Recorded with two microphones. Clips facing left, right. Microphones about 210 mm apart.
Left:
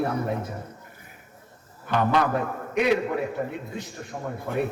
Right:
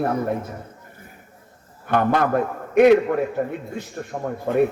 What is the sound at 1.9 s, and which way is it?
A man's voice, 55° right (ahead or behind).